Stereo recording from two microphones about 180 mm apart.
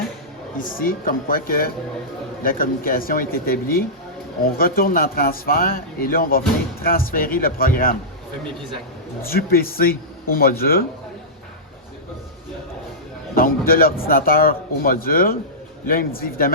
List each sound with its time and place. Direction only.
0.6 s a man's voice: 50° left (ahead or behind)
9.2 s a man's voice: 55° left (ahead or behind)
13.3 s a man's voice: 55° left (ahead or behind)